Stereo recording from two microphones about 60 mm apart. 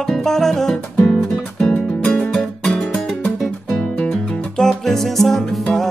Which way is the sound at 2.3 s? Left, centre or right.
Centre.